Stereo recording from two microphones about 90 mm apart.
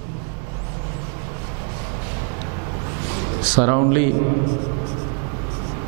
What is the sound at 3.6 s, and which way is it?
Speech, 10° right (ahead or behind).